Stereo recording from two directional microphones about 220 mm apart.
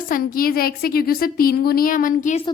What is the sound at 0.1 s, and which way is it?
A woman's voice, 40° left (ahead or behind).